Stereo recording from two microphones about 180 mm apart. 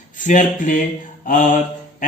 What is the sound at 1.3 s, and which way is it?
Mantra, 45° left (ahead or behind).